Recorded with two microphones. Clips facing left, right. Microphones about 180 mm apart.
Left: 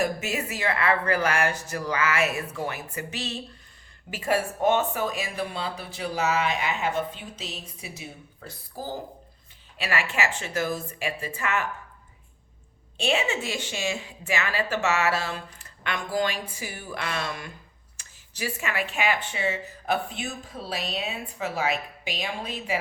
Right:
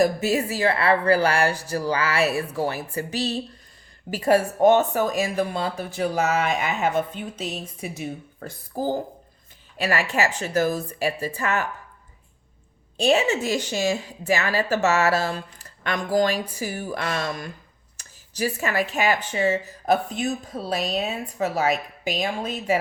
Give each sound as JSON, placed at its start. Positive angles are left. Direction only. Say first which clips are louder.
{"t": 0.0, "sound": "speech", "louder": "right 7 dB", "side_deg": -35}
{"t": 13.0, "sound": "speech", "louder": "right 6 dB", "side_deg": -40}